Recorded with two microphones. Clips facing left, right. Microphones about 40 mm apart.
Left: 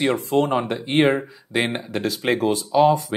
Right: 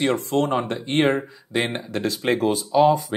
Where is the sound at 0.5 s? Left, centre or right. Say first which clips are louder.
Left 1 dB; centre.